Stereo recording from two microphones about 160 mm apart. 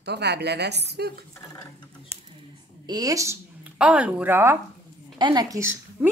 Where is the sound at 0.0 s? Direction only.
90° right.